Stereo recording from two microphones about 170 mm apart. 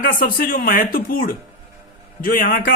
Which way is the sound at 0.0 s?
55° left (ahead or behind).